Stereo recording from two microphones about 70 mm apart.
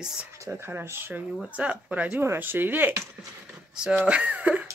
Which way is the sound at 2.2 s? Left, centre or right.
Right.